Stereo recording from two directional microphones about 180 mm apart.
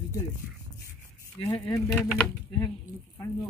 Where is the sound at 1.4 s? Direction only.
20° left (ahead or behind).